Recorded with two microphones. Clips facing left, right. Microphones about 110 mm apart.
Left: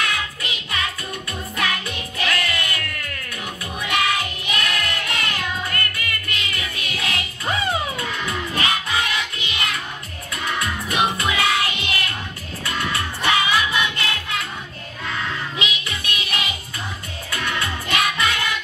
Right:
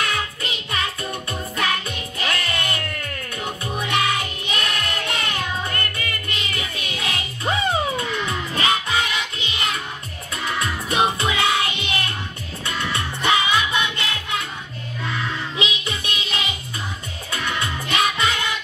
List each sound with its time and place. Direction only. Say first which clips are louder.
0.0 s music: right 1 dB; 30° right (ahead or behind)
15.6 s music: right 1 dB; 25° right (ahead or behind)